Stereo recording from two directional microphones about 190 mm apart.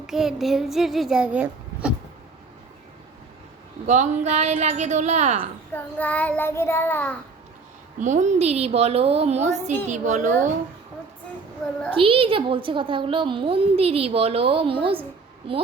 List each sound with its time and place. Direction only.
0.1 s a child's voice: centre (ahead or behind)
3.8 s a woman's voice: 40° right (ahead or behind)
5.7 s child singing: 10° left (ahead or behind)
7.9 s a woman's voice: 40° right (ahead or behind)
11.9 s a woman's voice: 30° right (ahead or behind)